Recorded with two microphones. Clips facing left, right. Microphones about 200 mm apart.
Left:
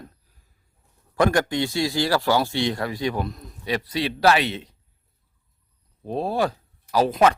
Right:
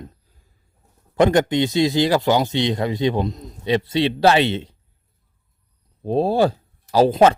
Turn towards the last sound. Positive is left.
turn(degrees=-30)  # may be behind; listen again after turning